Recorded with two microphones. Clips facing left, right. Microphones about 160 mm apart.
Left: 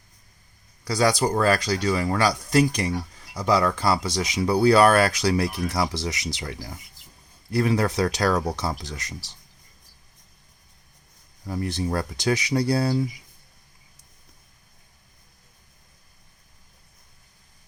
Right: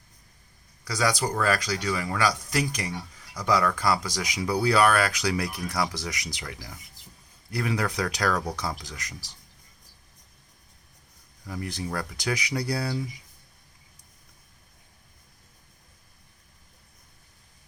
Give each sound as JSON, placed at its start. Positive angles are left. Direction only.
{"t": 0.9, "sound": "speech", "side_deg": 30}
{"t": 11.4, "sound": "speech", "side_deg": 35}